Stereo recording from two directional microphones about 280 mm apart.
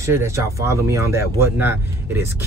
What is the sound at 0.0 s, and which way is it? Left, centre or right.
Speech, centre.